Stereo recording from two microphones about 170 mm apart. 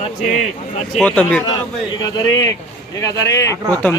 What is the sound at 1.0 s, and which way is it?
Speech, 5° left (ahead or behind).